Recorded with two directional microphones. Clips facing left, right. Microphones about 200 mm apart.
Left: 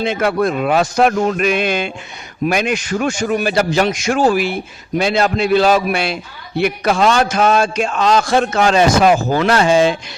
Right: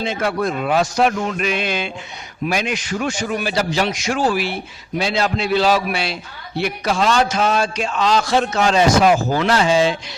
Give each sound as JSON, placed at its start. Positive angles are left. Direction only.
{"t": 0.0, "sound": "a man's voice", "side_deg": 60}